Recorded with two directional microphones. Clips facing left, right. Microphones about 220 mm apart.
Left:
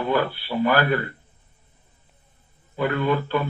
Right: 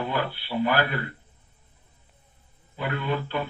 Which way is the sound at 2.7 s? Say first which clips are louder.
Left 6 dB; 45° left (ahead or behind).